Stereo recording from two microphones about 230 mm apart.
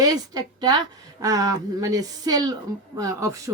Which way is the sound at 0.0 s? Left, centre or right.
Centre.